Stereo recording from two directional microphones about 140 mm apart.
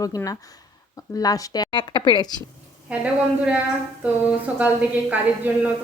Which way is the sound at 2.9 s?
10° right (ahead or behind).